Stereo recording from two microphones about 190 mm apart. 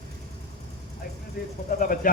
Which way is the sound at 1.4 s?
50° left (ahead or behind).